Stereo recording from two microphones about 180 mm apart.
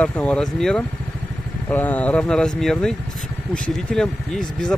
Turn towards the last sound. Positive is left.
turn(degrees=5)  # may be behind; listen again after turning